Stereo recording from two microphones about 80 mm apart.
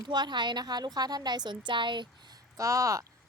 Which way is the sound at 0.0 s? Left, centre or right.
Right.